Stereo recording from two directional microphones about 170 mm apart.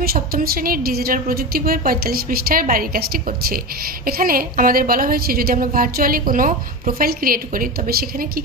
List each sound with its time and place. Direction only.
0.0 s a woman's voice: 60° right (ahead or behind)